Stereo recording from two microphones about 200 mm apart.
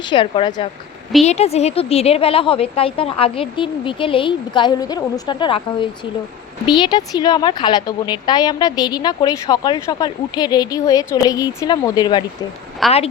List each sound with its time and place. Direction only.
0.0 s a woman's voice: 25° left (ahead or behind)
12.8 s a woman's voice: centre (ahead or behind)